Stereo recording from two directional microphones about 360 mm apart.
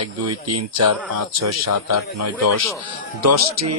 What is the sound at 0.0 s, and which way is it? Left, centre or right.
Speech, right.